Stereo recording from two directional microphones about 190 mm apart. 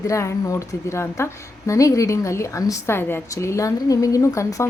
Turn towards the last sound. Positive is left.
turn(degrees=15)  # may be behind; listen again after turning